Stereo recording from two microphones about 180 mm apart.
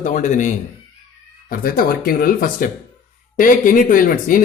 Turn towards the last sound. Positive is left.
turn(degrees=50)  # may be behind; listen again after turning